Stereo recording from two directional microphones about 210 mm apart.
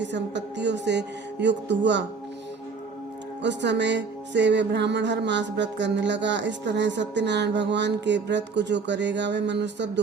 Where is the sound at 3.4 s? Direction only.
55° right (ahead or behind).